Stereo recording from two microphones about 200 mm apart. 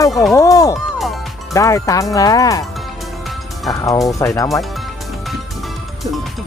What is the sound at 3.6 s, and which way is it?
Speech, 15° left (ahead or behind).